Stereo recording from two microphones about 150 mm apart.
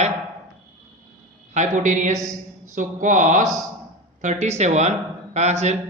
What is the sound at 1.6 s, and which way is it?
A man's voice, 55° right (ahead or behind).